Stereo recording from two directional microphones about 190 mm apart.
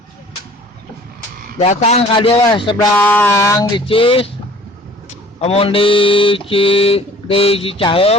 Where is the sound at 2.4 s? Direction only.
25° left (ahead or behind).